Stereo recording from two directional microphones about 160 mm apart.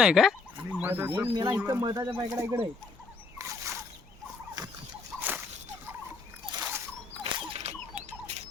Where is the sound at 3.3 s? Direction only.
20° right (ahead or behind).